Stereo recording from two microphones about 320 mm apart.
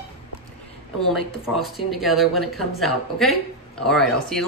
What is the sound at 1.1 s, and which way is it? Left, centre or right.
A woman's voice, centre.